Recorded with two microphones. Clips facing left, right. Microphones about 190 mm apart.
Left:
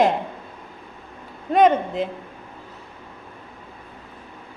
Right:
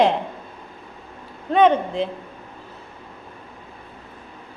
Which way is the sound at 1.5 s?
5° left (ahead or behind).